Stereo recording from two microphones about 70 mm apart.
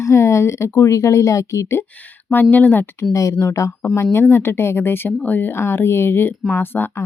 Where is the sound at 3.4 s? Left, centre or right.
Left.